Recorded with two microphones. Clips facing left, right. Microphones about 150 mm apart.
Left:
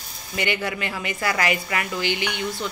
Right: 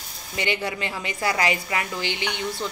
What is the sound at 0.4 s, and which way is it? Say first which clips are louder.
A woman's voice: left 1 dB; 25° right (ahead or behind).